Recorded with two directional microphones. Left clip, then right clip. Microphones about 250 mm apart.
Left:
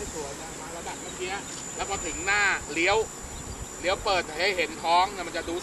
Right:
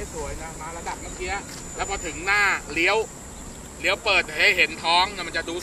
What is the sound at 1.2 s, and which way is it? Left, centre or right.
Speech, centre.